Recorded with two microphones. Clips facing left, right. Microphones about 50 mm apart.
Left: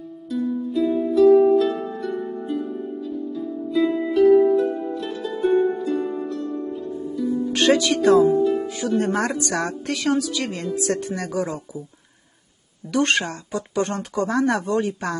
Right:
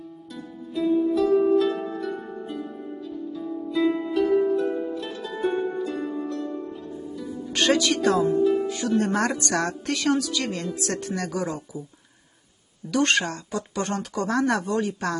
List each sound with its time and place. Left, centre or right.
0.3 s music: centre
7.5 s music: centre
8.2 s speech: centre
11.4 s speech: left
13.2 s speech: centre